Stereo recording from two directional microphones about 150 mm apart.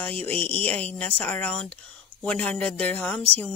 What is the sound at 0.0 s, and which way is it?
Speech, 10° left (ahead or behind).